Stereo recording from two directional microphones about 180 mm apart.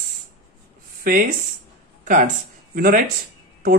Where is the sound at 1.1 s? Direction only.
50° right (ahead or behind).